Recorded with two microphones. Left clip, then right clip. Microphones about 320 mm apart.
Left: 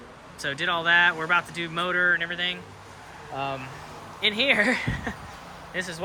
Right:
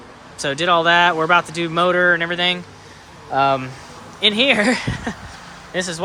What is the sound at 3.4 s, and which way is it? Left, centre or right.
Speech, right.